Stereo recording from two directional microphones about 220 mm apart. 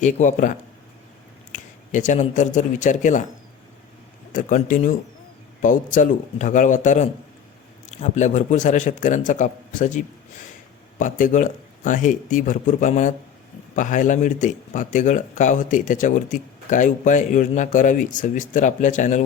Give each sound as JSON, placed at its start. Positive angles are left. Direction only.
{"t": 0.0, "sound": "speech", "side_deg": 35}
{"t": 1.5, "sound": "speech", "side_deg": 35}
{"t": 4.3, "sound": "speech", "side_deg": 35}